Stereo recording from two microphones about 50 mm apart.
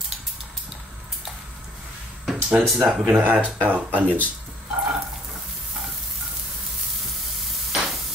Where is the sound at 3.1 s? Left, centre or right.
Right.